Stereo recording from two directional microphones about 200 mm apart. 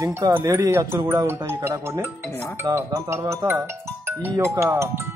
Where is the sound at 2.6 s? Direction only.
15° right (ahead or behind).